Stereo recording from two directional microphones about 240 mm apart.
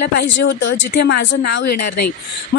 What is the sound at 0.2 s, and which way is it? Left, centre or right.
Speech, left.